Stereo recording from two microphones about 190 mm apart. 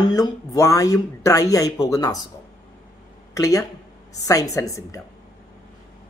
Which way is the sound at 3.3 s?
15° left (ahead or behind).